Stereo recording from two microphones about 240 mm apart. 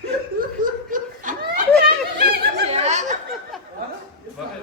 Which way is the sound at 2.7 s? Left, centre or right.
Right.